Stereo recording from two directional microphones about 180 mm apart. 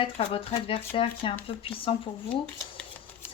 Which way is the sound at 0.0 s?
30° left (ahead or behind).